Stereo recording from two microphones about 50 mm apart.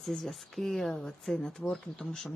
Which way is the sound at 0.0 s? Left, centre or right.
Centre.